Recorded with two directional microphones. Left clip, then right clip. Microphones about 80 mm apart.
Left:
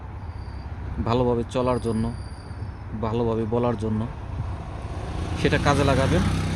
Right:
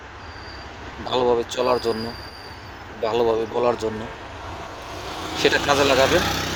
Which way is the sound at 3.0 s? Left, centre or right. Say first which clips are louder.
Right 5 dB; left.